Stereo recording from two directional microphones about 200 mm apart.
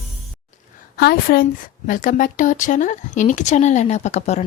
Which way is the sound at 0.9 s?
50° left (ahead or behind).